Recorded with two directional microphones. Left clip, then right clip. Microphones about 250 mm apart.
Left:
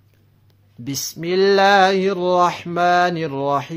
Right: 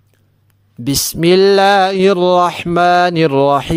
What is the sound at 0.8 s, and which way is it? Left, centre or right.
Speech, right.